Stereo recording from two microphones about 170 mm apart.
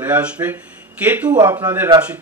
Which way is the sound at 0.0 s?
10° right (ahead or behind).